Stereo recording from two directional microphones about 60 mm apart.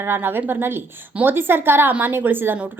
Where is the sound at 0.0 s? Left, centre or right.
Right.